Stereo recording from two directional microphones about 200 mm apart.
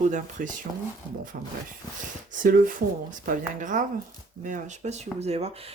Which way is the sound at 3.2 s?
40° right (ahead or behind).